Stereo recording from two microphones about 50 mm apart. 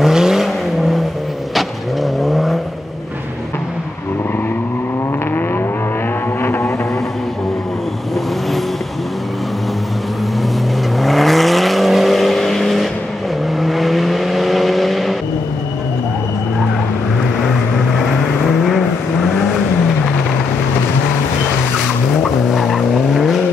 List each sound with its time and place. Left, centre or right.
0.0 s vehicle: centre
2.2 s vehicle: centre
6.4 s vehicle: left
11.0 s vehicle: centre
22.2 s vehicle: centre